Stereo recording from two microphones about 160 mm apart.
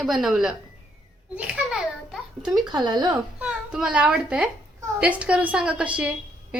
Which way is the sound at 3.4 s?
5° right (ahead or behind).